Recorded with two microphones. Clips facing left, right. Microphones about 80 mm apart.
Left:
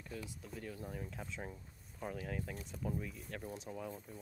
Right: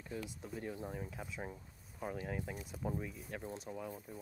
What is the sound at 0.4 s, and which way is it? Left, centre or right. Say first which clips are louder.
Speech: right 3 dB; right.